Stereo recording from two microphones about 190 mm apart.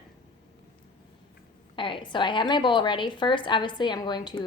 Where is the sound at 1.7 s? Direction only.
25° left (ahead or behind).